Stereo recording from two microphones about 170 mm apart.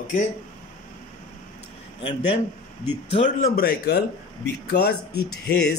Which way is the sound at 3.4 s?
60° left (ahead or behind).